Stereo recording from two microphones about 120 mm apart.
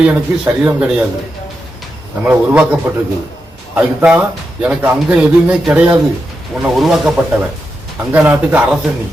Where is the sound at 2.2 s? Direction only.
10° right (ahead or behind).